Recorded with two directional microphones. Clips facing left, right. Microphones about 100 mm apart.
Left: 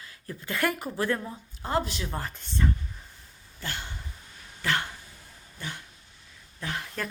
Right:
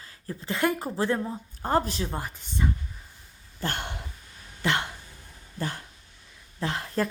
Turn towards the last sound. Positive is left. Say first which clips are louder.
# right 6 dB
turn(degrees=-30)  # may be behind; listen again after turning